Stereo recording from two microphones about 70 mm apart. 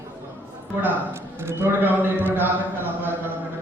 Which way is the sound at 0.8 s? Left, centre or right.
Right.